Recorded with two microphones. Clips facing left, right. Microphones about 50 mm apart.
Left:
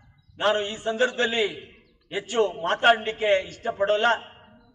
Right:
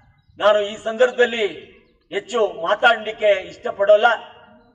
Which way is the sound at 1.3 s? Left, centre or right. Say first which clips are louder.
Right 3 dB; right.